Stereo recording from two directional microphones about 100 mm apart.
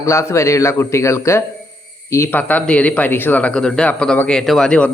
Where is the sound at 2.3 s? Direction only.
15° left (ahead or behind).